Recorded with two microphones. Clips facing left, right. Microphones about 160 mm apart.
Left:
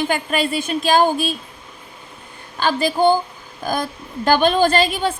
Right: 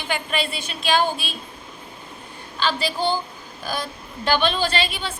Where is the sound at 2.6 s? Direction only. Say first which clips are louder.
Left 7 dB; 45° left (ahead or behind).